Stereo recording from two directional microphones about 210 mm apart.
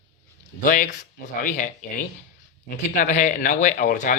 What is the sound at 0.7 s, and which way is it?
Speech, 40° left (ahead or behind).